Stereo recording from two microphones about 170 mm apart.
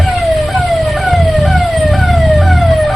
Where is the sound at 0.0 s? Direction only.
Centre (ahead or behind).